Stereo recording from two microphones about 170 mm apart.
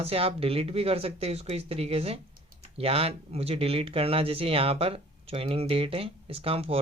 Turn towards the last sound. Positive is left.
turn(degrees=-35)  # may be behind; listen again after turning